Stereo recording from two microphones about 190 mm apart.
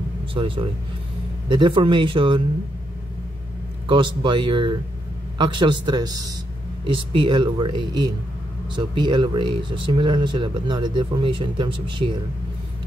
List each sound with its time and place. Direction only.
0.3 s speech: 25° right (ahead or behind)
3.8 s speech: 25° right (ahead or behind)